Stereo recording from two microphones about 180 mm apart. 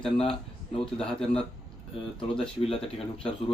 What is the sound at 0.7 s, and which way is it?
Speech, centre (ahead or behind).